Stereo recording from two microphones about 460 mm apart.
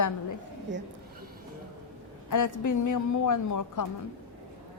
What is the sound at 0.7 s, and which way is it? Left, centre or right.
Speech, right.